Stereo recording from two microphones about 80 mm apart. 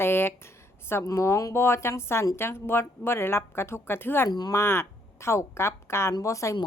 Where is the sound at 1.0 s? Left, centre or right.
Left.